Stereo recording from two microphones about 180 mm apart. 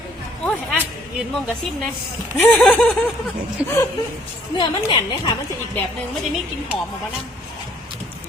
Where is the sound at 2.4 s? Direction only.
10° left (ahead or behind).